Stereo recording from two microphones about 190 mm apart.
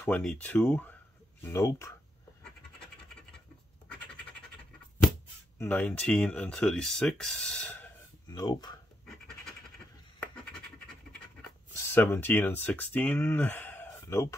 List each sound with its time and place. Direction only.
0.0 s speech: 5° left (ahead or behind)
2.4 s scratch: 5° left (ahead or behind)
5.6 s speech: 10° left (ahead or behind)
8.3 s speech: 20° left (ahead or behind)
9.0 s scratch: centre (ahead or behind)
11.9 s speech: 10° left (ahead or behind)